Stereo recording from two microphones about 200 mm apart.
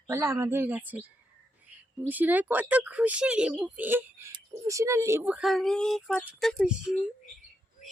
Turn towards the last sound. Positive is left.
turn(degrees=-5)  # may be behind; listen again after turning